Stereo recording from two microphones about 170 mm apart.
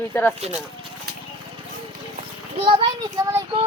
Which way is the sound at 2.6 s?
30° right (ahead or behind).